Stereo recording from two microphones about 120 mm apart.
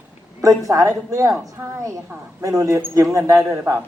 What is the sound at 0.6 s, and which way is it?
A man's voice, 25° right (ahead or behind).